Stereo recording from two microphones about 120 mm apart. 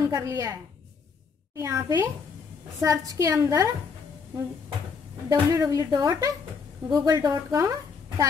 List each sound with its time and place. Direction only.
0.1 s a woman's voice: 25° right (ahead or behind)
5.3 s a woman's voice: 30° right (ahead or behind)